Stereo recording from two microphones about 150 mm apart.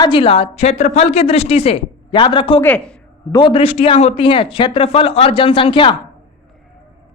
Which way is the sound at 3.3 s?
35° left (ahead or behind).